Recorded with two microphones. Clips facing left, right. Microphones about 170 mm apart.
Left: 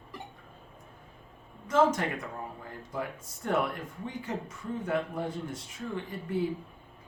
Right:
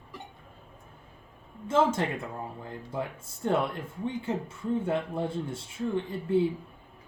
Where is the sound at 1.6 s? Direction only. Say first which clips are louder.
Even; 30° right (ahead or behind).